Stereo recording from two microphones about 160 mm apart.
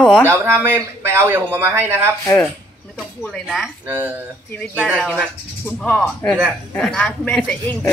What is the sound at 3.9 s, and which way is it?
Speech, 10° right (ahead or behind).